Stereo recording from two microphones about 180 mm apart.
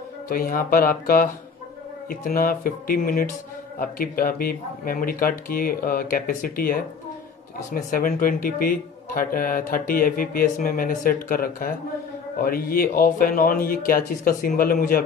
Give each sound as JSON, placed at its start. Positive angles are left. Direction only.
{"t": 0.3, "sound": "a man's voice", "side_deg": 55}